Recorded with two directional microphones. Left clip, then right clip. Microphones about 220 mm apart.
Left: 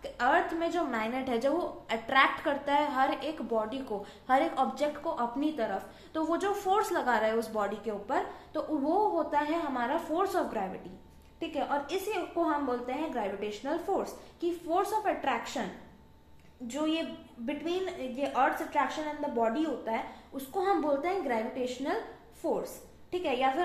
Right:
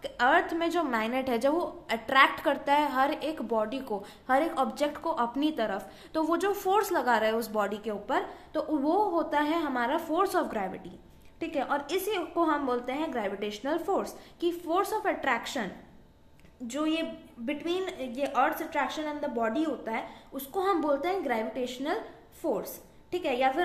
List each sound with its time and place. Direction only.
0.0 s a woman's voice: 45° right (ahead or behind)